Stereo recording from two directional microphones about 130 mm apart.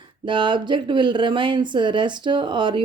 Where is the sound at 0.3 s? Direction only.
35° right (ahead or behind).